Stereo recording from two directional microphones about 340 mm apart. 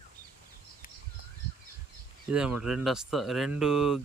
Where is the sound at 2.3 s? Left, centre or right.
Centre.